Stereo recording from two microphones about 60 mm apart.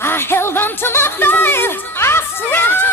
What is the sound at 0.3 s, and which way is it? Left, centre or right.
Music, left.